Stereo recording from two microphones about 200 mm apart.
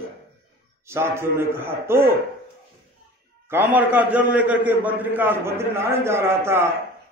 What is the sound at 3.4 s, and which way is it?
A man's voice, 10° right (ahead or behind).